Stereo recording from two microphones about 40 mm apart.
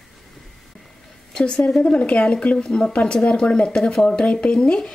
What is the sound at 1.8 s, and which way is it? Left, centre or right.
Speech, left.